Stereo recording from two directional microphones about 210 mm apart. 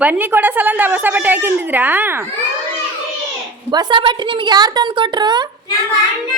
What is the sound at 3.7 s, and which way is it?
A woman's voice, 20° right (ahead or behind).